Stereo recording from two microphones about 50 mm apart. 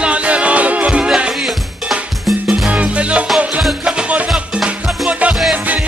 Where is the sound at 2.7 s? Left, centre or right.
Right.